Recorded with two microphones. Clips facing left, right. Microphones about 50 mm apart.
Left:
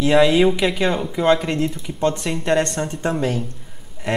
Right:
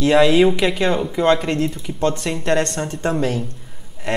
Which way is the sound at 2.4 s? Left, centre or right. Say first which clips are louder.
Even; centre.